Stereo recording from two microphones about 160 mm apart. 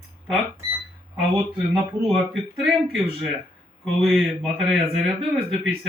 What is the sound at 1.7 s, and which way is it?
Speech, centre (ahead or behind).